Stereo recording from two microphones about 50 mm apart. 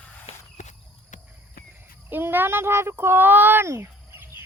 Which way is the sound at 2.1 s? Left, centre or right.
Right.